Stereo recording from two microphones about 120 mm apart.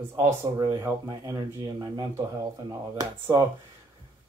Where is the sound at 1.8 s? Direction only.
30° right (ahead or behind).